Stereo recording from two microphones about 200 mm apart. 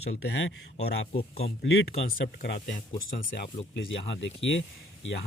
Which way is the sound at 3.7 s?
70° left (ahead or behind).